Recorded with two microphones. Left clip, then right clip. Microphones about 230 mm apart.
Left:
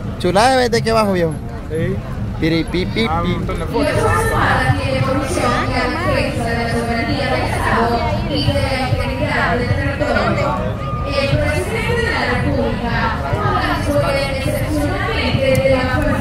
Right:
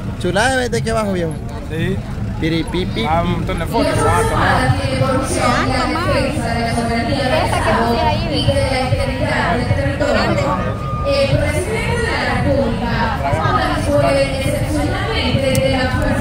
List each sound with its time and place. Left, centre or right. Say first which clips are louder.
0.2 s speech: left 3 dB; centre
2.4 s speech: left 2 dB; centre